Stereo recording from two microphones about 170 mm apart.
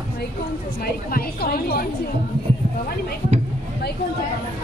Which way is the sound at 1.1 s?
65° left (ahead or behind).